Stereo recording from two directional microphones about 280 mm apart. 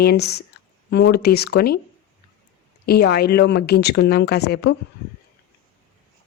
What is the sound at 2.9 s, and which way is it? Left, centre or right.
Speech, left.